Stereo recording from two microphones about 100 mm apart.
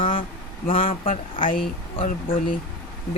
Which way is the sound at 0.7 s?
65° left (ahead or behind).